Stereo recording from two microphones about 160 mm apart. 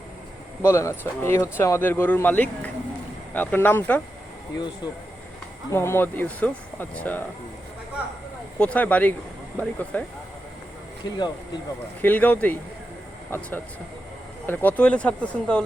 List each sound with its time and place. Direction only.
0.6 s speech: 15° left (ahead or behind)
5.7 s speech: 15° left (ahead or behind)
8.5 s speech: 10° left (ahead or behind)
11.0 s speech: 30° left (ahead or behind)
12.0 s speech: 10° left (ahead or behind)
14.4 s speech: 10° left (ahead or behind)